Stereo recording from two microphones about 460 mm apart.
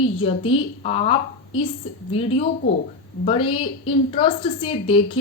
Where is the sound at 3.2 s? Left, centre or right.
Centre.